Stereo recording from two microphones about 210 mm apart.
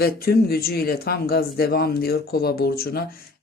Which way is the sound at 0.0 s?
45° left (ahead or behind).